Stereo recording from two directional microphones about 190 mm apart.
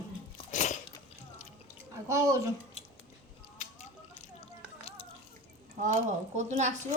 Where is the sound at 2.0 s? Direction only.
15° right (ahead or behind).